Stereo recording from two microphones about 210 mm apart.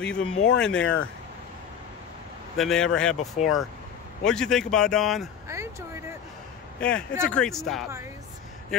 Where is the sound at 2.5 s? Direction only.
Centre (ahead or behind).